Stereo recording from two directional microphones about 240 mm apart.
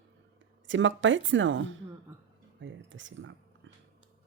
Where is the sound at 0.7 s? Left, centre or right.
Right.